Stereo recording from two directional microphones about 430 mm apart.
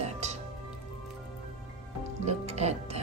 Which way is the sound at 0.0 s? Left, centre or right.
Centre.